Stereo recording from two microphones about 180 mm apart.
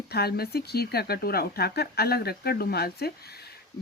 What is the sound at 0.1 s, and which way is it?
Speech, 60° left (ahead or behind).